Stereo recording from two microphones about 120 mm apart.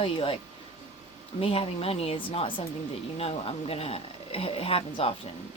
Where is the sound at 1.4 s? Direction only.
55° left (ahead or behind).